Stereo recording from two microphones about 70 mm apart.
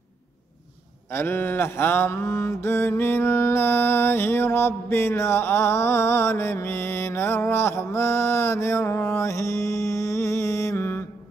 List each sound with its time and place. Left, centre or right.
1.1 s mantra: left